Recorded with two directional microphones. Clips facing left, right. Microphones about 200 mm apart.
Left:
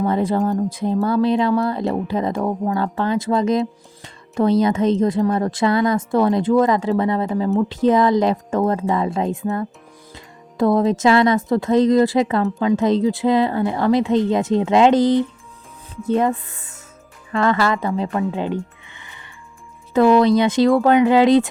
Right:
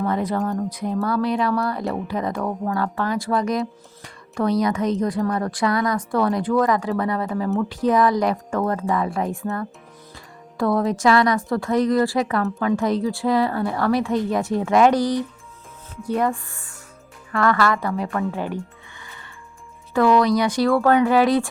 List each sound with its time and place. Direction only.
0.0 s speech: 25° left (ahead or behind)